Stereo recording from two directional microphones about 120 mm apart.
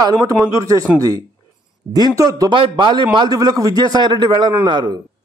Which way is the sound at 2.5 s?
45° right (ahead or behind).